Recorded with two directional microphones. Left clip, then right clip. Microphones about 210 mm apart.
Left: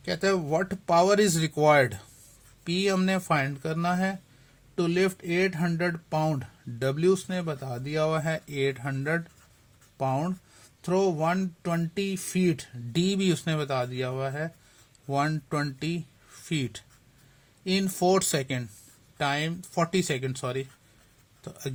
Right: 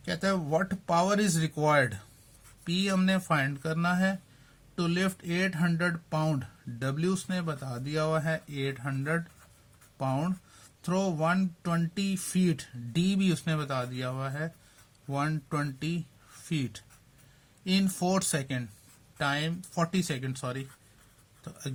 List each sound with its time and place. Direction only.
0.0 s speech: 30° left (ahead or behind)